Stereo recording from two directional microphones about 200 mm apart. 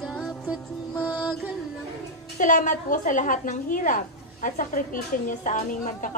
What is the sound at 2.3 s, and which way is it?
A woman's voice, 40° left (ahead or behind).